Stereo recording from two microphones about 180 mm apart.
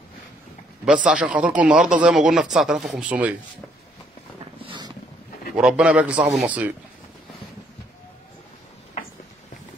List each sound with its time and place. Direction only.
0.8 s speech: 5° right (ahead or behind)
4.6 s boat: 25° right (ahead or behind)
5.6 s speech: 5° right (ahead or behind)